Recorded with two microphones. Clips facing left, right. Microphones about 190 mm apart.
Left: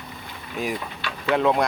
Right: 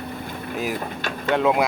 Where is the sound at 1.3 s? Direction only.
Centre (ahead or behind).